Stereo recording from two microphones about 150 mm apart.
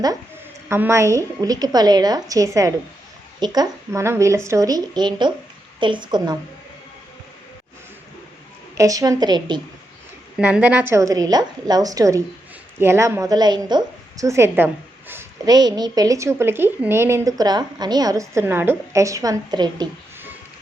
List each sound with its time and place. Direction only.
0.7 s a woman's voice: 15° right (ahead or behind)
8.8 s a woman's voice: 25° right (ahead or behind)
10.3 s a woman's voice: 10° right (ahead or behind)
15.4 s a woman's voice: 25° right (ahead or behind)